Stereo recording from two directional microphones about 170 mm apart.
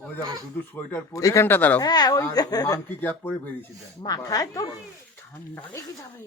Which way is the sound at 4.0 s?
20° left (ahead or behind).